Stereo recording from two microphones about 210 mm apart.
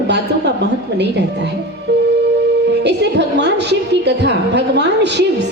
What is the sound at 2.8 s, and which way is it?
A woman's voice, 55° right (ahead or behind).